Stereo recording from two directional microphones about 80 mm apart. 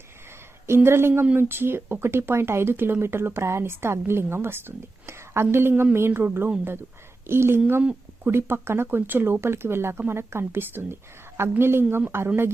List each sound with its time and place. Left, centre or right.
0.7 s speech: right